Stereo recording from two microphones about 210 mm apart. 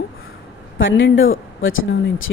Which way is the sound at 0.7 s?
65° left (ahead or behind).